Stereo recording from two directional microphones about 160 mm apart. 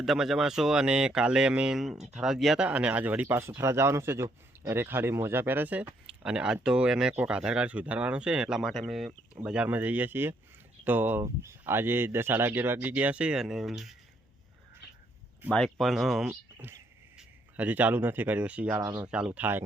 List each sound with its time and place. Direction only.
0.0 s speech: centre (ahead or behind)
15.4 s speech: 5° left (ahead or behind)
16.3 s speech: 15° right (ahead or behind)
18.8 s speech: 25° right (ahead or behind)
19.0 s speech: 5° right (ahead or behind)